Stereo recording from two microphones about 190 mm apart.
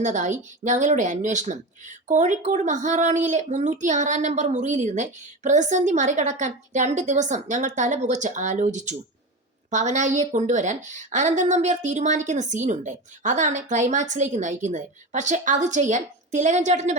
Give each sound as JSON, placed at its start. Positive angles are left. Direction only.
{"t": 0.0, "sound": "speech", "side_deg": -40}